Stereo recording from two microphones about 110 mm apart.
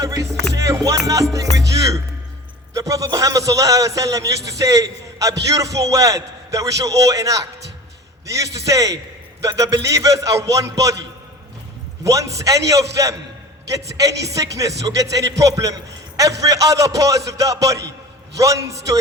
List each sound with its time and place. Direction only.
0.0 s a man's voice: 30° right (ahead or behind)
0.5 s music: 30° right (ahead or behind)
1.5 s a man's voice: 30° right (ahead or behind)
12.0 s a man's voice: 30° right (ahead or behind)